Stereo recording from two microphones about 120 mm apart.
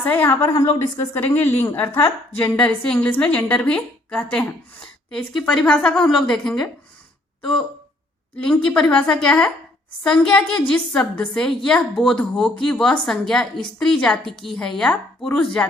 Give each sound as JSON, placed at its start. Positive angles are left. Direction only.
{"t": 0.0, "sound": "a woman's voice", "side_deg": 15}
{"t": 2.6, "sound": "a woman's voice", "side_deg": 10}
{"t": 8.4, "sound": "a woman's voice", "side_deg": 10}